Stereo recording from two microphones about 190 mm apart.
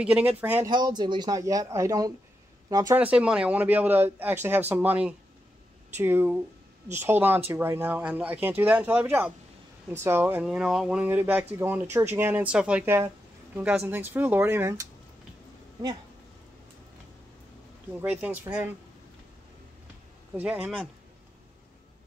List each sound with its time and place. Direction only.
0.0 s speech: 5° right (ahead or behind)
0.7 s speech: 25° right (ahead or behind)
3.0 s speech: 5° right (ahead or behind)
18.1 s speech: 10° right (ahead or behind)
20.3 s speech: 10° right (ahead or behind)